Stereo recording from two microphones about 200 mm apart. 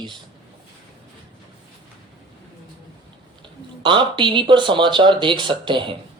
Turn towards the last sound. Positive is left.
turn(degrees=-25)  # may be behind; listen again after turning